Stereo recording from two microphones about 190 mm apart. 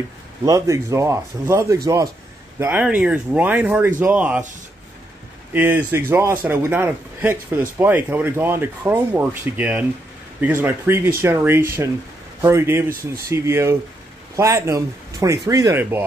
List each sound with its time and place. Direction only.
0.5 s a man's voice: 15° right (ahead or behind)
5.5 s a man's voice: 10° right (ahead or behind)